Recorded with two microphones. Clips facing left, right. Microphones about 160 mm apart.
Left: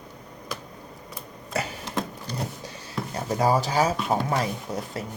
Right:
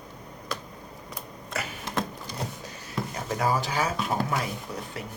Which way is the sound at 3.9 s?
Centre (ahead or behind).